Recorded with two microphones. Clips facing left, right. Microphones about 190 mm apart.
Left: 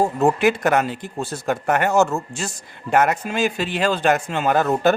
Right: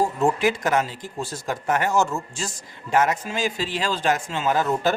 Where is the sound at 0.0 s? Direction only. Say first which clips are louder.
Left 3 dB; 60° left (ahead or behind).